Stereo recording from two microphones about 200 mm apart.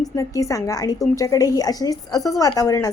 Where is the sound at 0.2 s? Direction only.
15° left (ahead or behind).